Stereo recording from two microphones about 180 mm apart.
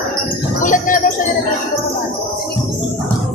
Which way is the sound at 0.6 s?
45° left (ahead or behind).